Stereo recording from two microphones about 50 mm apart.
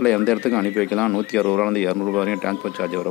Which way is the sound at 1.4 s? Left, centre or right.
Centre.